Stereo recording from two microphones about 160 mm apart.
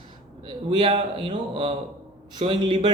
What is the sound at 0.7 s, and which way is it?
Speech, 30° right (ahead or behind).